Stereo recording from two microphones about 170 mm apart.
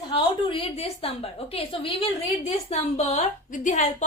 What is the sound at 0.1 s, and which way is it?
A woman's voice, 30° left (ahead or behind).